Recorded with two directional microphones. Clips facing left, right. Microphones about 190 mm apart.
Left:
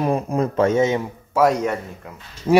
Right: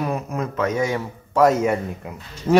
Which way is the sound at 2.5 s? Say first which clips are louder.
Left 1 dB; 10° left (ahead or behind).